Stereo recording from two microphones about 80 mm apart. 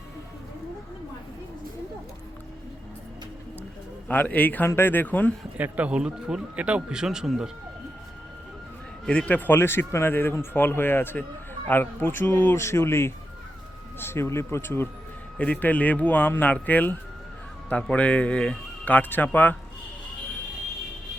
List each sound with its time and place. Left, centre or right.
4.1 s speech: left
5.5 s speech: centre
9.0 s speech: centre; by 14.8 s left
15.4 s speech: centre